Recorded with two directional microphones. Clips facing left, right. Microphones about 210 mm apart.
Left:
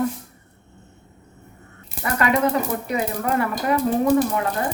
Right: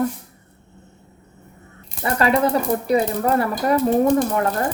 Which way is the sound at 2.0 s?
30° right (ahead or behind).